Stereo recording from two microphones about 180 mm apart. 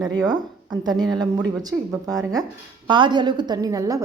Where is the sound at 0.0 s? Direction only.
20° right (ahead or behind).